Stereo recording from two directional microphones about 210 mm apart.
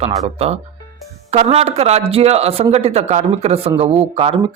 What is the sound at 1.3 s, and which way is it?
A man's voice, 30° right (ahead or behind).